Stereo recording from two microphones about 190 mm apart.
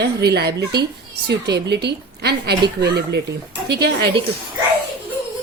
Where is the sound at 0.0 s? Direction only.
60° right (ahead or behind).